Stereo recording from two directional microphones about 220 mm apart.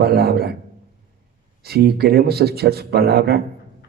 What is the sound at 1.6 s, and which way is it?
A man's voice, 45° right (ahead or behind).